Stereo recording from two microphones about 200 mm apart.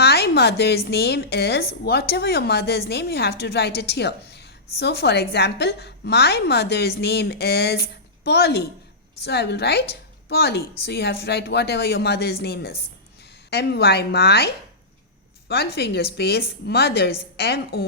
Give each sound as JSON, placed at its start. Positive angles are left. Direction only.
{"t": 0.0, "sound": "a woman's voice", "side_deg": 55}